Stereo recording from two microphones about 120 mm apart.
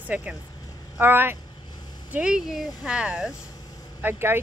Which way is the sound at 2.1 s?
5° right (ahead or behind).